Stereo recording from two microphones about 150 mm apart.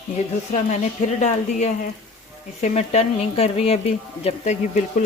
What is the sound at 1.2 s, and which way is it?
Speech, 50° left (ahead or behind).